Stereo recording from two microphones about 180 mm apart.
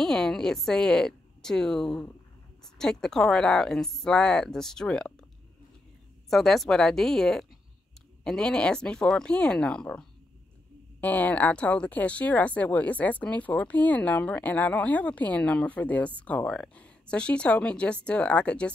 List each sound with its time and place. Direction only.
0.0 s a woman's voice: centre (ahead or behind)
6.3 s speech: centre (ahead or behind)